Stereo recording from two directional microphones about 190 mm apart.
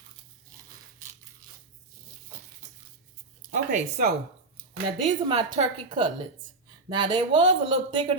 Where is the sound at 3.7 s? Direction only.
40° right (ahead or behind).